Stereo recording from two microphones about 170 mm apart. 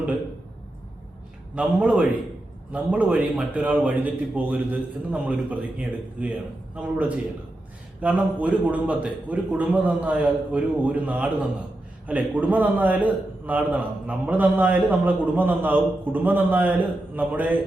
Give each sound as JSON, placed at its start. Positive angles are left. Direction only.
{"t": 1.5, "sound": "a man's voice", "side_deg": -5}
{"t": 8.0, "sound": "a man's voice", "side_deg": -10}